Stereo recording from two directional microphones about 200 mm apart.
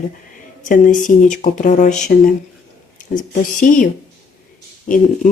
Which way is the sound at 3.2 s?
40° left (ahead or behind).